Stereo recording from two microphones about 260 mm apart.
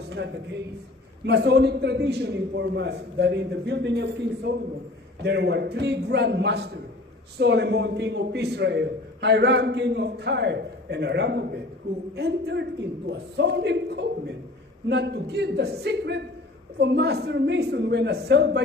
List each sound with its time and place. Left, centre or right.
0.1 s a man's voice: right